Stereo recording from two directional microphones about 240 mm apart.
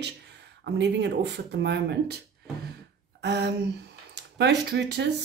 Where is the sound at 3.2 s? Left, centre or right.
Right.